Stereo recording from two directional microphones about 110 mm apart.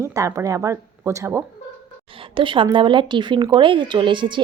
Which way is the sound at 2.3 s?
50° right (ahead or behind).